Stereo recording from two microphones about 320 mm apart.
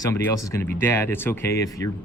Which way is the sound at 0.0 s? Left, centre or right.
Centre.